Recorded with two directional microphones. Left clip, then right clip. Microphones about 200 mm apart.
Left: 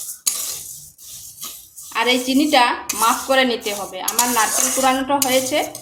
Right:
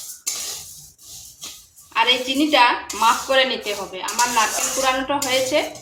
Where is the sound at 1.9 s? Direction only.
60° left (ahead or behind).